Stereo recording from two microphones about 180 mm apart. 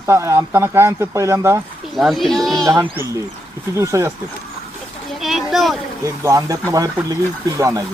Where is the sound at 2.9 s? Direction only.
15° right (ahead or behind).